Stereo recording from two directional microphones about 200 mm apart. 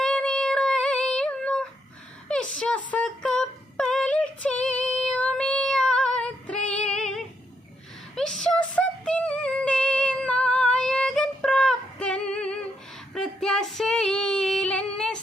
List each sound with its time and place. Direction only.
0.0 s music: 5° left (ahead or behind)
2.6 s a sound: 5° left (ahead or behind)
8.1 s female singing: centre (ahead or behind)